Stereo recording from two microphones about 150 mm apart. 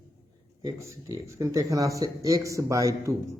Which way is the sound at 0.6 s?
20° right (ahead or behind).